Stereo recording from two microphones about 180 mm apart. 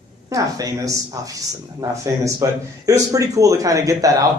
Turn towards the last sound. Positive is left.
turn(degrees=-20)  # may be behind; listen again after turning